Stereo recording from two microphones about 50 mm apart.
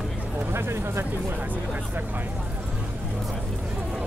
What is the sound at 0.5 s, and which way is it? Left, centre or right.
Speech, right.